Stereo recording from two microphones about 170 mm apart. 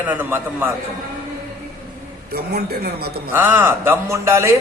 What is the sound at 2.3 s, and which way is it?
Speech, 70° right (ahead or behind).